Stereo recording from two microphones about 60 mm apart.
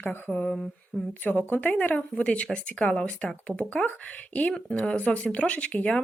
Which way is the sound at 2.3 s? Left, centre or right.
Centre.